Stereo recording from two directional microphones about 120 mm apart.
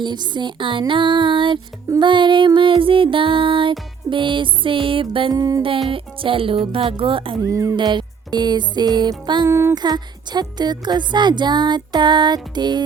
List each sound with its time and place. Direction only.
0.0 s music: 40° right (ahead or behind)
5.3 s speech: 30° right (ahead or behind)
5.9 s music: 45° right (ahead or behind)
7.4 s music: 25° right (ahead or behind)
7.8 s speech: 40° right (ahead or behind)
9.5 s music: 20° right (ahead or behind)
9.7 s speech: 35° right (ahead or behind)